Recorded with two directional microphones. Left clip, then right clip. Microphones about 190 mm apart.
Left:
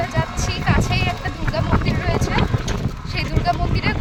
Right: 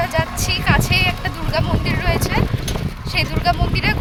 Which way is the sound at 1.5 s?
15° right (ahead or behind).